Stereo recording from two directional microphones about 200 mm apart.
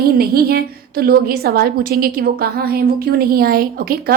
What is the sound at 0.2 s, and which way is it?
A woman's voice, 50° right (ahead or behind).